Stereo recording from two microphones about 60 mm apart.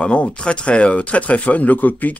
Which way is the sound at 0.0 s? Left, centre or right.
Centre.